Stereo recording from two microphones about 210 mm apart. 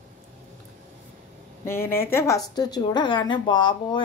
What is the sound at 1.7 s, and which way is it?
A woman's voice, 10° left (ahead or behind).